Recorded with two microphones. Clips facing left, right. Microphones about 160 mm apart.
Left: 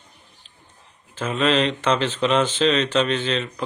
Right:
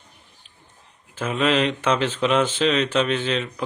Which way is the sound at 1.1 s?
10° right (ahead or behind).